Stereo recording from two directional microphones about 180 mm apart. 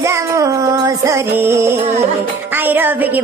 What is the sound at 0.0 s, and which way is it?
Music, 15° right (ahead or behind).